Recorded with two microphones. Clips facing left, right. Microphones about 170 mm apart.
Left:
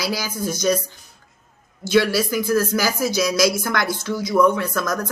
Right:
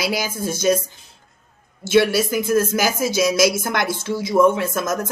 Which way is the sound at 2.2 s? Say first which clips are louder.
Right 1 dB; 25° right (ahead or behind).